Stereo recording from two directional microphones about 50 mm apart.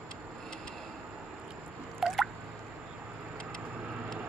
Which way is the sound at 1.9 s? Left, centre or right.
Centre.